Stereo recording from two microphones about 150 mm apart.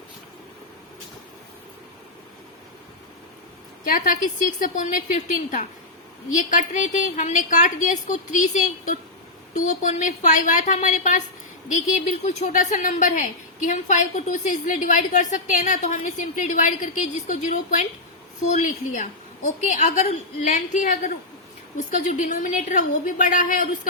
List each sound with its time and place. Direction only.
3.8 s a woman's voice: 60° left (ahead or behind)